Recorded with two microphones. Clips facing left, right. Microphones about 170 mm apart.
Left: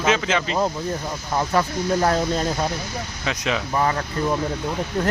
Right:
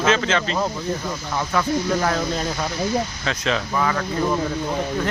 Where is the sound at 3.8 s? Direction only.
30° left (ahead or behind).